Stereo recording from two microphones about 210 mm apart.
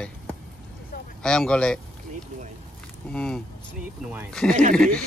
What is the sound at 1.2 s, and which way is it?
Speech, 5° left (ahead or behind).